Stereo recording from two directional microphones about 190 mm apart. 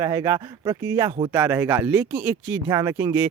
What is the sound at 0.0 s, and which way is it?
Speech, 20° right (ahead or behind).